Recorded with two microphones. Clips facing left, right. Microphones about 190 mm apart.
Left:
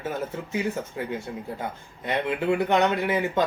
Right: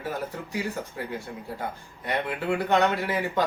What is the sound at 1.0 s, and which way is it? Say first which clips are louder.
Speech: left 3 dB; 20° left (ahead or behind).